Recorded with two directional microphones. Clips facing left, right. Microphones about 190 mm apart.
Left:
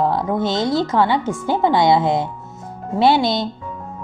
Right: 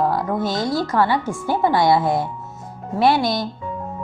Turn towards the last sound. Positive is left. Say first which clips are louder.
# left 2 dB
turn(degrees=25)  # may be behind; listen again after turning